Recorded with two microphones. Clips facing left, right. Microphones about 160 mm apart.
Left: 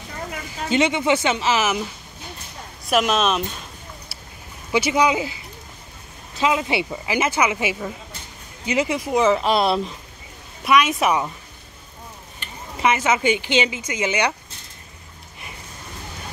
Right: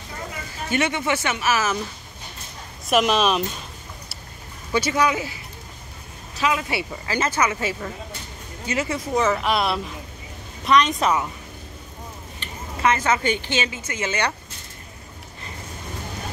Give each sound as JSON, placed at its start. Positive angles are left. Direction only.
{"t": 0.7, "sound": "speech", "side_deg": 20}
{"t": 2.9, "sound": "speech", "side_deg": 0}
{"t": 4.7, "sound": "speech", "side_deg": 15}
{"t": 6.4, "sound": "speech", "side_deg": 20}
{"t": 9.4, "sound": "speech", "side_deg": 30}
{"t": 10.6, "sound": "speech", "side_deg": 5}
{"t": 12.8, "sound": "speech", "side_deg": 15}